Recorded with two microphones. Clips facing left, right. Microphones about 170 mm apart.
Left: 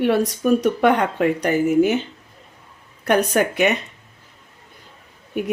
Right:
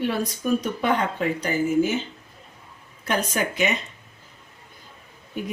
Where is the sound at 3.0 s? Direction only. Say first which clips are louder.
Left 7 dB; 65° left (ahead or behind).